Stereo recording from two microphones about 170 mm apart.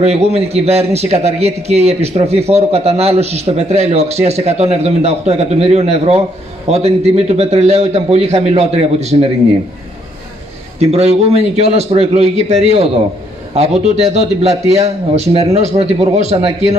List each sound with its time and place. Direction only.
0.0 s a man's voice: 40° right (ahead or behind)
10.8 s a man's voice: 40° right (ahead or behind)
14.1 s a man's voice: 40° right (ahead or behind)